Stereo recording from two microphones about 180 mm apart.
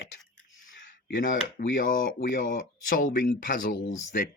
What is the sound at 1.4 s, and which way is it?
Speech, 45° left (ahead or behind).